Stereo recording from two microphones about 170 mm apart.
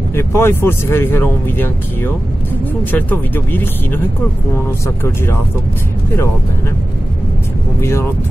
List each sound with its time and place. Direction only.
0.1 s speech: 15° left (ahead or behind)